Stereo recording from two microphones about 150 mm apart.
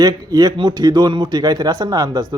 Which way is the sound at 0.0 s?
25° right (ahead or behind).